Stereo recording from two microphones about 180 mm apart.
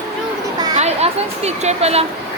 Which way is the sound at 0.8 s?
35° right (ahead or behind).